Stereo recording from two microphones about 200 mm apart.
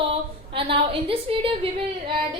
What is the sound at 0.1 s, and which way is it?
A woman's voice, 25° right (ahead or behind).